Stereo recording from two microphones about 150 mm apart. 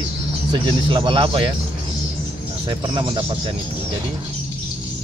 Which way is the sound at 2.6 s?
30° right (ahead or behind).